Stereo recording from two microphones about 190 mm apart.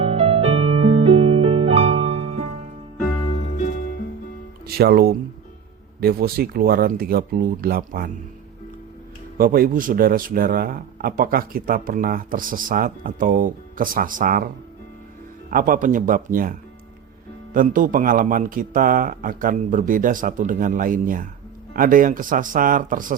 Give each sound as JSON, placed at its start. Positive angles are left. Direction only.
{"t": 0.0, "sound": "music", "side_deg": -30}
{"t": 3.2, "sound": "music", "side_deg": 30}
{"t": 3.7, "sound": "music", "side_deg": 50}
{"t": 4.6, "sound": "a man's voice", "side_deg": -55}
{"t": 9.4, "sound": "a man's voice", "side_deg": -50}
{"t": 15.4, "sound": "a man's voice", "side_deg": -45}